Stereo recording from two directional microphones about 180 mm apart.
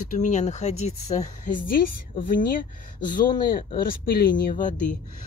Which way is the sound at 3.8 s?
55° left (ahead or behind).